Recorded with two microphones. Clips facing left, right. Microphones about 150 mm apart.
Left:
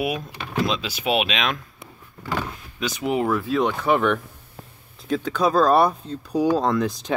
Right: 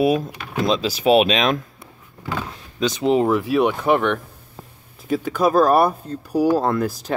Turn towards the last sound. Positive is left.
turn(degrees=-5)  # may be behind; listen again after turning